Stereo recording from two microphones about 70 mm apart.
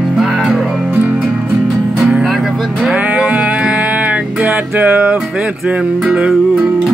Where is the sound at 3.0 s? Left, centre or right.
Right.